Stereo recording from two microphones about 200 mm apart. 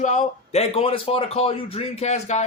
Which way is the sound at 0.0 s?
35° left (ahead or behind).